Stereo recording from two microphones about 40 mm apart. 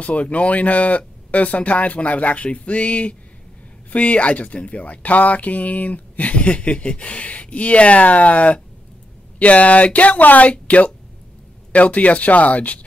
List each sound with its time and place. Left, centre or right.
0.0 s a woman's voice: left